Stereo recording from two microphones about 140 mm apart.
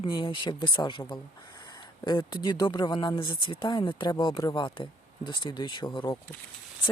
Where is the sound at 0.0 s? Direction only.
35° left (ahead or behind).